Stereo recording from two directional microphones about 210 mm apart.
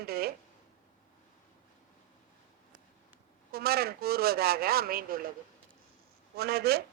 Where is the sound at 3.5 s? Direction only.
45° right (ahead or behind).